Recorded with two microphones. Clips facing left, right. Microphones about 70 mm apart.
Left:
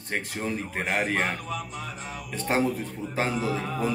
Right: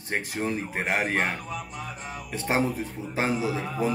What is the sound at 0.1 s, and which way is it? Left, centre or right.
Speech, centre.